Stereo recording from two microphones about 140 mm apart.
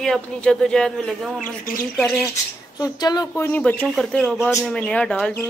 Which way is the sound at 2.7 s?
30° left (ahead or behind).